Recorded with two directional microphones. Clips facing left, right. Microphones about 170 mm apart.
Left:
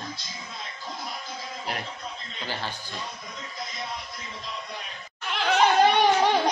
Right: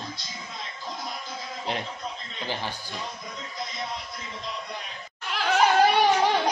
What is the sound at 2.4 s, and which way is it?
Speech, 15° right (ahead or behind).